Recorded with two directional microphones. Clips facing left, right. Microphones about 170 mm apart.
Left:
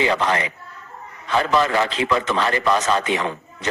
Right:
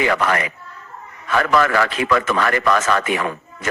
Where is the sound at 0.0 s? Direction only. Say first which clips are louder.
Right 1 dB; 20° left (ahead or behind).